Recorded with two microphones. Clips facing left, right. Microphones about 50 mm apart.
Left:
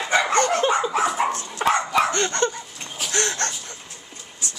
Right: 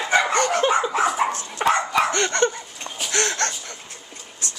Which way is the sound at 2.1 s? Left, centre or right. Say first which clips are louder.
Right 2 dB; right.